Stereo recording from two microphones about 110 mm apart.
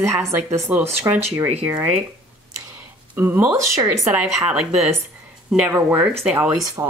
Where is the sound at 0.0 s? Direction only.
25° right (ahead or behind).